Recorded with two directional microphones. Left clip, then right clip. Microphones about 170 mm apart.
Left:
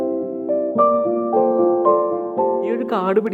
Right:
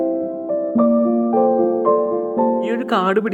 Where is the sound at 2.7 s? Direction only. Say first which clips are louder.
Right 1 dB; 20° right (ahead or behind).